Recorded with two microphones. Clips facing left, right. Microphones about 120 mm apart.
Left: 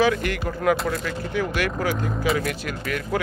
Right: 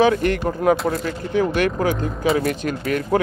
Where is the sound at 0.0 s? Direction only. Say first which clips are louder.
Right 5 dB; 35° right (ahead or behind).